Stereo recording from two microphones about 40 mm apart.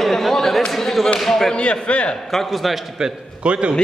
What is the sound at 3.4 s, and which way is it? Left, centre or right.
Speech, right.